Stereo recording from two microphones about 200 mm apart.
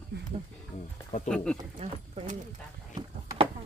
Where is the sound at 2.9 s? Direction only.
20° right (ahead or behind).